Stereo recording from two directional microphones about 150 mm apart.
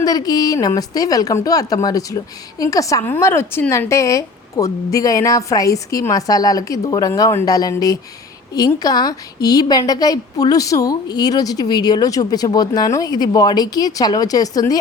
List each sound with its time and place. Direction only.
0.0 s speech: 25° left (ahead or behind)